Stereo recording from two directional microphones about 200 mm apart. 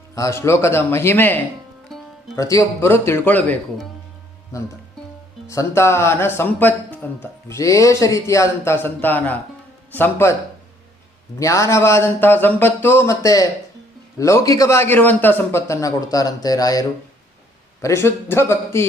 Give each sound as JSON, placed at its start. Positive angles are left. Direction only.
{"t": 0.2, "sound": "speech", "side_deg": 15}
{"t": 1.9, "sound": "music", "side_deg": 0}
{"t": 2.3, "sound": "speech", "side_deg": 15}
{"t": 5.5, "sound": "speech", "side_deg": 15}
{"t": 11.3, "sound": "speech", "side_deg": 15}
{"t": 17.8, "sound": "speech", "side_deg": 15}